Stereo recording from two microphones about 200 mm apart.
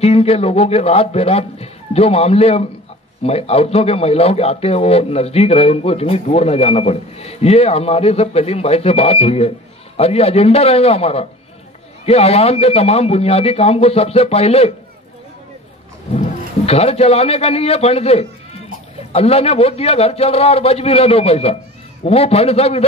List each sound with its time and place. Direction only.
0.0 s a man's voice: 30° left (ahead or behind)
16.1 s a man's voice: 30° left (ahead or behind)